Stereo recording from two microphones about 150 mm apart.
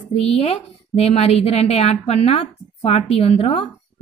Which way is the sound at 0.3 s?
45° left (ahead or behind).